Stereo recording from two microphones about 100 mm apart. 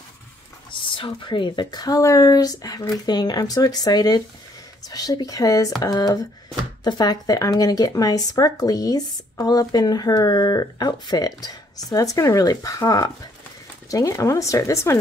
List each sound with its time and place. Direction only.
0.7 s speech: 60° left (ahead or behind); by 15.0 s 30° left (ahead or behind)